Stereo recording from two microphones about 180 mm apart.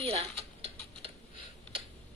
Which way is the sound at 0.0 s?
30° right (ahead or behind).